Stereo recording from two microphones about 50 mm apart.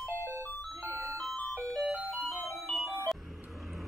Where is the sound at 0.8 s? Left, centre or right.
Right.